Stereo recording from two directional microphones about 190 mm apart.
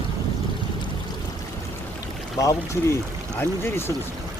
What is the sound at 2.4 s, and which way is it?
Speech, 15° left (ahead or behind).